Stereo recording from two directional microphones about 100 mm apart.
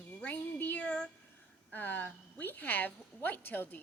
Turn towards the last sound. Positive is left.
turn(degrees=20)  # may be behind; listen again after turning